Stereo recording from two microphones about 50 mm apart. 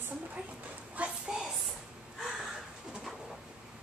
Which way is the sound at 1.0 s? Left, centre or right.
Right.